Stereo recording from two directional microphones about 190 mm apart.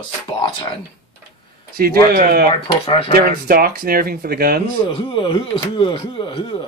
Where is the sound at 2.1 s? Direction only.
50° right (ahead or behind).